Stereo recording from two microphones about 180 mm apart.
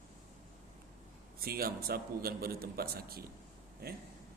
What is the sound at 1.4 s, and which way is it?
A man's voice, 55° right (ahead or behind).